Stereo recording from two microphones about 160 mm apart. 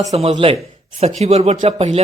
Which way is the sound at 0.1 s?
40° right (ahead or behind).